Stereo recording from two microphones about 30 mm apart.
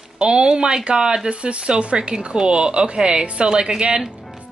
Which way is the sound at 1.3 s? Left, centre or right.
Right.